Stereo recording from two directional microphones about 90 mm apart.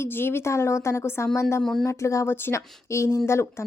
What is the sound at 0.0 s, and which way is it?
Speech, 25° left (ahead or behind).